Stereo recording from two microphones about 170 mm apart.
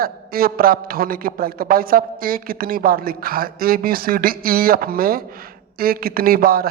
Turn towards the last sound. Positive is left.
turn(degrees=-60)  # may be behind; listen again after turning